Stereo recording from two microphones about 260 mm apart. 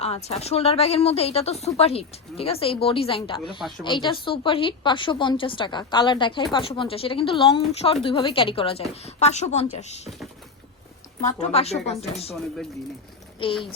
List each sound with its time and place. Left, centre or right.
0.0 s a woman's voice: left
11.3 s a woman's voice: left